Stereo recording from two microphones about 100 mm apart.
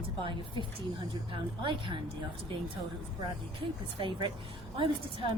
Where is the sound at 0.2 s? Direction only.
55° right (ahead or behind).